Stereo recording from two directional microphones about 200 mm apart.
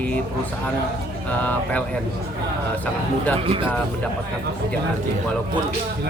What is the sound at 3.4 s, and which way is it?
Speech, 25° right (ahead or behind).